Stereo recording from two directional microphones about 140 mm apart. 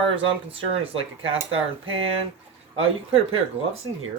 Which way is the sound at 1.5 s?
40° right (ahead or behind).